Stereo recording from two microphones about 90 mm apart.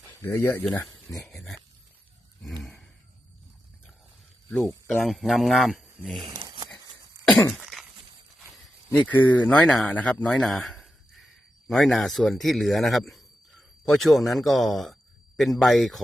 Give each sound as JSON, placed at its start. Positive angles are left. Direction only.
{"t": 0.2, "sound": "speech", "side_deg": 25}
{"t": 1.1, "sound": "a man's voice", "side_deg": 5}
{"t": 2.4, "sound": "a sound", "side_deg": 0}
{"t": 4.4, "sound": "speech", "side_deg": 20}
{"t": 5.0, "sound": "a man's voice", "side_deg": 0}
{"t": 6.2, "sound": "crumpling", "side_deg": -55}
{"t": 7.6, "sound": "cough", "side_deg": -5}
{"t": 8.9, "sound": "a man's voice", "side_deg": 20}